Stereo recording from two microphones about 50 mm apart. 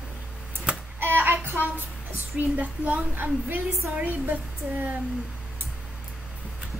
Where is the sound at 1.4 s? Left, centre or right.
Right.